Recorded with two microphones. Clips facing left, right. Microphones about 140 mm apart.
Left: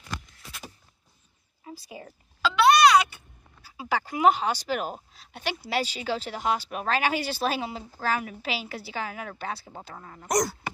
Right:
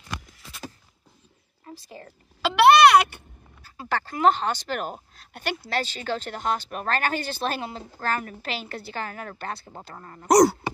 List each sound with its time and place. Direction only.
1.6 s speech: 10° left (ahead or behind)
2.4 s speech: 60° right (ahead or behind)
3.6 s speech: 5° left (ahead or behind)
10.2 s speech: 75° right (ahead or behind)